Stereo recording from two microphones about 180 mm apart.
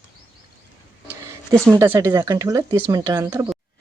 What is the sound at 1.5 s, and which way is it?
Speech, 15° right (ahead or behind).